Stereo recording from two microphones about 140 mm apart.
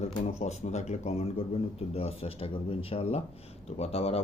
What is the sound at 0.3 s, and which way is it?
Speech, 50° left (ahead or behind).